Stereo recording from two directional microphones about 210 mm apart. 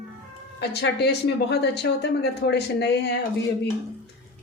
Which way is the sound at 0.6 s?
55° left (ahead or behind).